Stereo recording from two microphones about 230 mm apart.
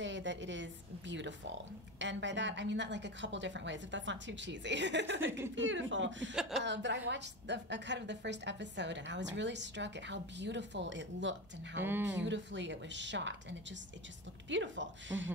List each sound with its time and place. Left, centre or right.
0.0 s a woman's voice: right
11.8 s speech: centre
12.2 s a woman's voice: right